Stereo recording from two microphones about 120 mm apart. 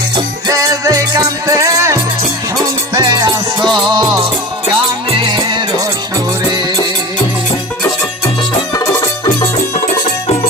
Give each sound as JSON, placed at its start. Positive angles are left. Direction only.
{"t": 0.4, "sound": "music", "side_deg": -30}
{"t": 3.0, "sound": "music", "side_deg": -40}
{"t": 5.2, "sound": "music", "side_deg": -40}
{"t": 8.7, "sound": "music", "side_deg": 25}